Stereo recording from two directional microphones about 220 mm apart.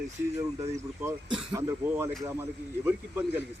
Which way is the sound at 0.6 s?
30° right (ahead or behind).